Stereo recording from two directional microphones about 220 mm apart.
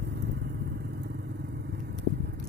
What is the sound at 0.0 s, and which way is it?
Vehicle, 50° right (ahead or behind).